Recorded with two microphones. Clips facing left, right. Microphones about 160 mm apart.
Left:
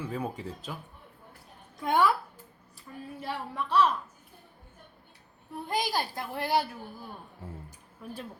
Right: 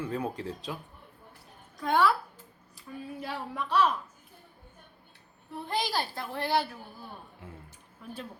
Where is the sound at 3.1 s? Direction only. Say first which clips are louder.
Left 2 dB; centre (ahead or behind).